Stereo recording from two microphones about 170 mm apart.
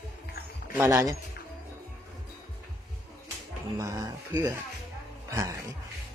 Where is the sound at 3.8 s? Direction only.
20° right (ahead or behind).